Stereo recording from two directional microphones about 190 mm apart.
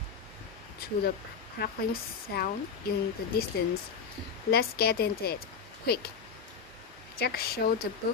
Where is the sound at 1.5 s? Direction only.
55° left (ahead or behind).